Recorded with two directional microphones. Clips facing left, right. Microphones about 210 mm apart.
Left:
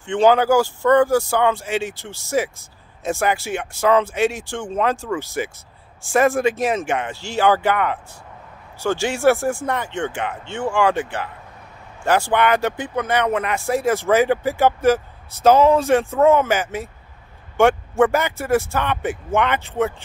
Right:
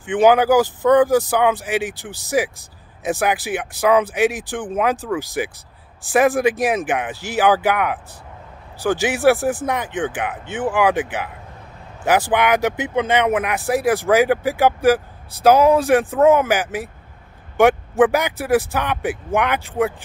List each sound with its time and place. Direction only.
0.0 s speech: 15° right (ahead or behind)
7.3 s speech: 5° right (ahead or behind)